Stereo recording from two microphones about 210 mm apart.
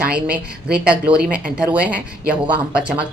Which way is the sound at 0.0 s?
5° right (ahead or behind).